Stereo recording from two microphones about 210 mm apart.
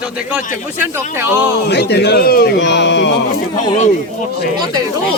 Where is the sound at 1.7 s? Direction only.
50° left (ahead or behind).